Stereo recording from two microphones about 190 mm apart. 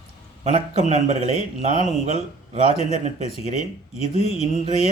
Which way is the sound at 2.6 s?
35° left (ahead or behind).